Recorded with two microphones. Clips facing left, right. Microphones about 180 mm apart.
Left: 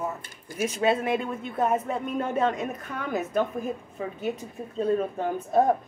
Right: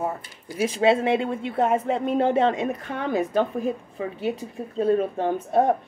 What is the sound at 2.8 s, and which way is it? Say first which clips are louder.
Speech: right 5 dB; 30° right (ahead or behind).